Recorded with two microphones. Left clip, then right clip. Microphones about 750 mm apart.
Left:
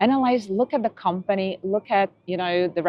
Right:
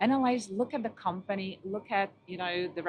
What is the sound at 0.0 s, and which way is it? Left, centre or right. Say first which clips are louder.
A woman's voice: left 8 dB; left.